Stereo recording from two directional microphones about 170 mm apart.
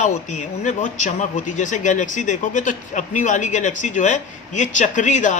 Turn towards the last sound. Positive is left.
turn(degrees=45)  # may be behind; listen again after turning